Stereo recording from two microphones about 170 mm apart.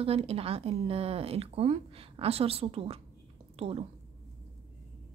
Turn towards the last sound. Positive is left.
turn(degrees=-35)  # may be behind; listen again after turning